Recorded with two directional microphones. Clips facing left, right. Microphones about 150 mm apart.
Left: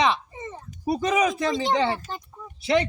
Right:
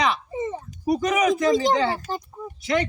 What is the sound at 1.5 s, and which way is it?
Speech, 40° right (ahead or behind).